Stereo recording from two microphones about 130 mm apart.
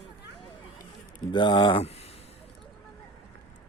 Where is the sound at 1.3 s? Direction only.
35° left (ahead or behind).